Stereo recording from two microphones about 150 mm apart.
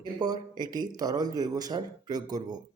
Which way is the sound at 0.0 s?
25° right (ahead or behind).